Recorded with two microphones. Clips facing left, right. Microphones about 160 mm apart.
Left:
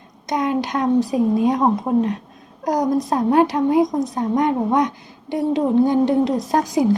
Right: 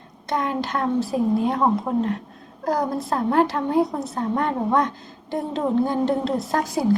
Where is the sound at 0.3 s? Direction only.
15° left (ahead or behind).